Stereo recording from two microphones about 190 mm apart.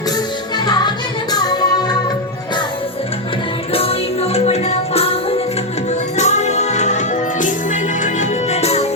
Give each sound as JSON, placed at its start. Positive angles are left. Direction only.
{"t": 0.5, "sound": "music", "side_deg": 20}
{"t": 3.7, "sound": "music", "side_deg": 30}